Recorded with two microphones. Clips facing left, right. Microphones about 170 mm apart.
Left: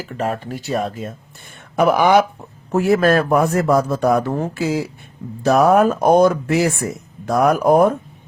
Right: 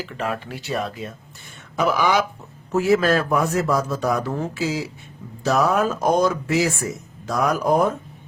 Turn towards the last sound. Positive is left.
turn(degrees=55)  # may be behind; listen again after turning